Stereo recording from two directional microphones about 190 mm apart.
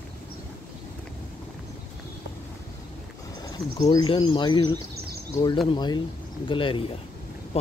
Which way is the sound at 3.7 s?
20° left (ahead or behind).